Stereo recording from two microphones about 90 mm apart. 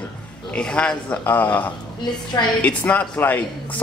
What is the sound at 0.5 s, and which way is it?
Speech, 10° left (ahead or behind).